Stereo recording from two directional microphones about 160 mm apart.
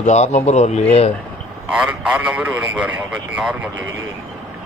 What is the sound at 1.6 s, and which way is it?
A man's voice, 5° right (ahead or behind).